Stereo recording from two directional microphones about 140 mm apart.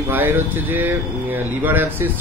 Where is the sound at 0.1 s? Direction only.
15° right (ahead or behind).